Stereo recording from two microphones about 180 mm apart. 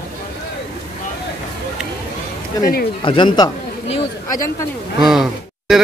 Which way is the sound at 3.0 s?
25° left (ahead or behind).